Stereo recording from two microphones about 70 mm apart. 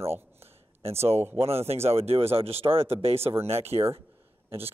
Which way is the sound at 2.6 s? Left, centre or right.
Right.